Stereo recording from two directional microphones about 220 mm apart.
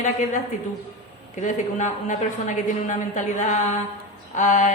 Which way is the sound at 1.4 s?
35° left (ahead or behind).